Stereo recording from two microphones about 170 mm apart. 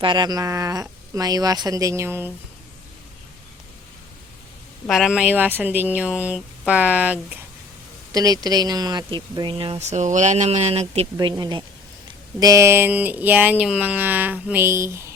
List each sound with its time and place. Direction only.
0.0 s speech: 25° right (ahead or behind)
4.9 s speech: 5° right (ahead or behind)
8.1 s speech: 20° right (ahead or behind); by 11.1 s 35° right (ahead or behind)
11.2 s speech: 25° right (ahead or behind)